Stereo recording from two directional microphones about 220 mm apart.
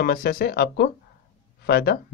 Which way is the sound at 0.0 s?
45° left (ahead or behind).